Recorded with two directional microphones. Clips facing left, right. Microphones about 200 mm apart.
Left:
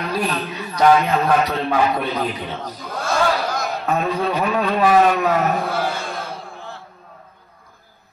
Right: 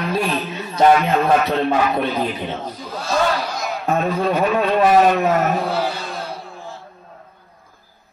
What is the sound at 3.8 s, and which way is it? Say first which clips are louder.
A man's voice: right 3 dB; 25° right (ahead or behind).